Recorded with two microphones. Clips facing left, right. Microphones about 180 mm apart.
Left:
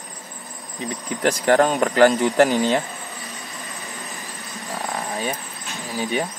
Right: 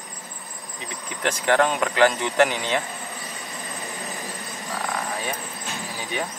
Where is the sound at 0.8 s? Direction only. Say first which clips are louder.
Left 6 dB; 35° left (ahead or behind).